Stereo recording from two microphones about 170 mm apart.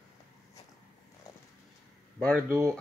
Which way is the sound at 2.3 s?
15° right (ahead or behind).